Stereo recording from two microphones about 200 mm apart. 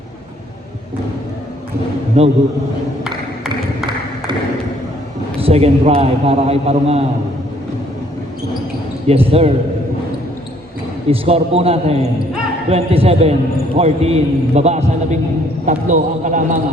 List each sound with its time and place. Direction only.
2.2 s a man's voice: 35° right (ahead or behind)
3.0 s a sound: centre (ahead or behind)
5.4 s a man's voice: 30° right (ahead or behind)
9.0 s speech: 30° right (ahead or behind)
11.1 s a man's voice: 30° right (ahead or behind)